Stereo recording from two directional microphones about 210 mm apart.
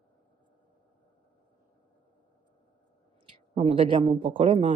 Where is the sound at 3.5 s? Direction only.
25° right (ahead or behind).